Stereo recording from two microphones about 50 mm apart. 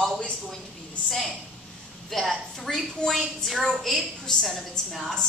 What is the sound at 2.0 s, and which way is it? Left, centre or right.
A woman's voice, centre.